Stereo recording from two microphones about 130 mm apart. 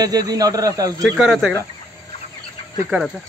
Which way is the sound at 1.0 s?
Centre (ahead or behind).